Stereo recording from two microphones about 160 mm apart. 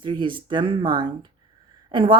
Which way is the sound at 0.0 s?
30° right (ahead or behind).